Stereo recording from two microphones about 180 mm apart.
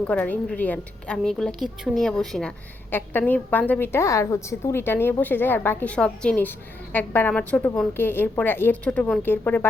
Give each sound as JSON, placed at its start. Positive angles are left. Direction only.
{"t": 0.1, "sound": "a woman's voice", "side_deg": 5}